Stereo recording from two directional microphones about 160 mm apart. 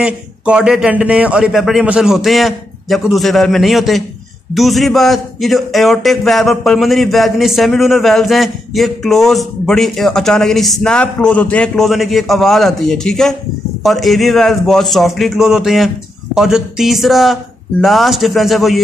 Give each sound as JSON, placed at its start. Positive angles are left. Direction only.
{"t": 0.0, "sound": "a man's voice", "side_deg": -5}